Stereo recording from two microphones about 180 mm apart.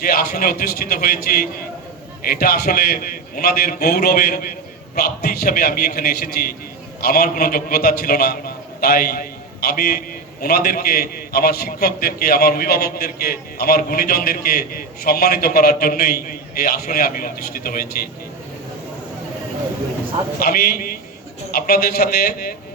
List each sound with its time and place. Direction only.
0.0 s a man's voice: 55° left (ahead or behind)
20.4 s a man's voice: 60° left (ahead or behind)